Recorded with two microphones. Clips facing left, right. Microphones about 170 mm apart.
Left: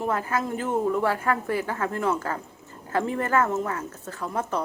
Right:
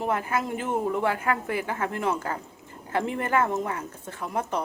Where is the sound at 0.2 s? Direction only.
25° right (ahead or behind).